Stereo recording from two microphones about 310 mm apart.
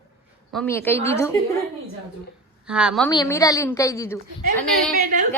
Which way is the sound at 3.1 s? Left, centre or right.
Centre.